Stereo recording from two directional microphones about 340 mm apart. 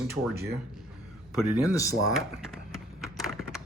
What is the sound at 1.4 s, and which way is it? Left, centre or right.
Speech, centre.